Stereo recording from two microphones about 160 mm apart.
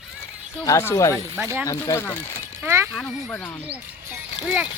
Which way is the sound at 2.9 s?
Centre (ahead or behind).